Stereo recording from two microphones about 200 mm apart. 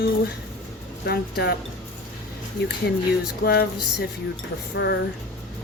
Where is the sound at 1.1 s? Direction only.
55° left (ahead or behind).